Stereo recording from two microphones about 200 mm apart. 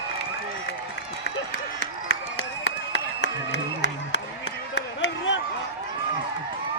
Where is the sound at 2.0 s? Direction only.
75° left (ahead or behind).